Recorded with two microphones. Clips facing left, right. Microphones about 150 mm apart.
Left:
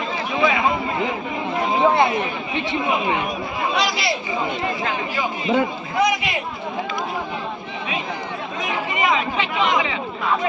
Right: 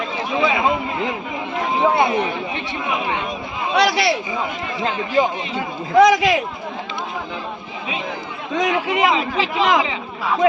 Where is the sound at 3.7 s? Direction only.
65° right (ahead or behind).